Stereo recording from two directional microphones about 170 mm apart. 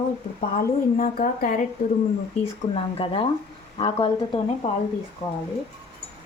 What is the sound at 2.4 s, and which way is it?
A woman's voice, 35° left (ahead or behind).